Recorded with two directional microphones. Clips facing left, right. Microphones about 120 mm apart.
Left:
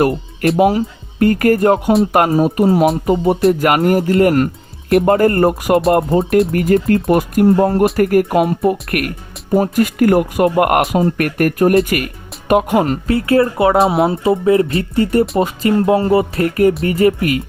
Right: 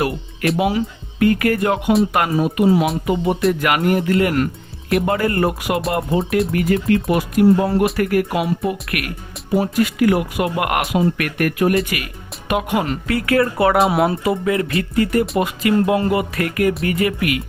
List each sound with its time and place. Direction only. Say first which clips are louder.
0.6 s speech: left 6 dB; 40° left (ahead or behind)
13.1 s speech: left 3 dB; 30° left (ahead or behind)